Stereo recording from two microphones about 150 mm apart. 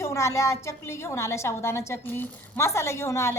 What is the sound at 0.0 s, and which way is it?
A woman's voice, 20° left (ahead or behind).